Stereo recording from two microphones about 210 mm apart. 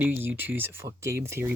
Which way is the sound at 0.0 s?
10° right (ahead or behind).